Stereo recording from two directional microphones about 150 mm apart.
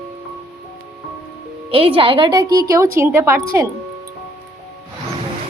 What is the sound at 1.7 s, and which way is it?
A woman's voice, 40° right (ahead or behind).